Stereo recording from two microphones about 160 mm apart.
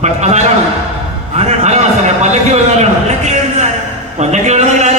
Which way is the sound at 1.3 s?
45° right (ahead or behind).